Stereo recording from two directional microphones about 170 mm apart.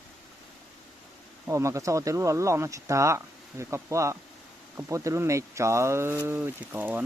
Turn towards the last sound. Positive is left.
turn(degrees=-10)  # may be behind; listen again after turning